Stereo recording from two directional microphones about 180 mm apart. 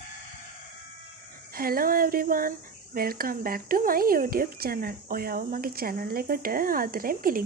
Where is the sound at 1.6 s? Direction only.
55° right (ahead or behind).